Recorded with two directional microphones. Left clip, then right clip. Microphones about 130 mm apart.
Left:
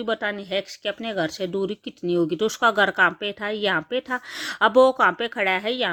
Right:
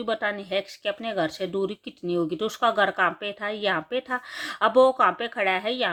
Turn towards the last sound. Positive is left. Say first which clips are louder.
# left 2 dB
turn(degrees=35)  # may be behind; listen again after turning